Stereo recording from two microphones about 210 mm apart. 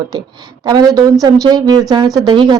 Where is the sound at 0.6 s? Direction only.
20° right (ahead or behind).